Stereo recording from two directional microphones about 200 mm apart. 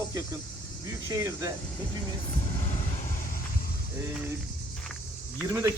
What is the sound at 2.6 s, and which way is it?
Vehicle, 35° left (ahead or behind).